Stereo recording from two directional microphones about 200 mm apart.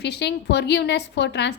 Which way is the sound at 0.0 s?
55° left (ahead or behind).